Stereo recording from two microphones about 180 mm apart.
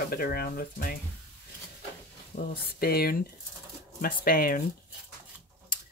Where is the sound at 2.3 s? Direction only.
55° left (ahead or behind).